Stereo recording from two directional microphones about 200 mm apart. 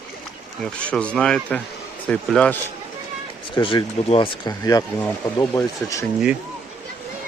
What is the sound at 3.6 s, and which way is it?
Speech, 25° left (ahead or behind).